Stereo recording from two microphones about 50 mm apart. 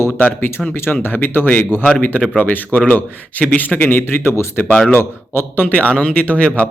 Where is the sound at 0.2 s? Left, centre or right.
Left.